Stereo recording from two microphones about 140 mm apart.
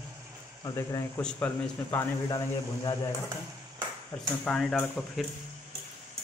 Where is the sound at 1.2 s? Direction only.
5° left (ahead or behind).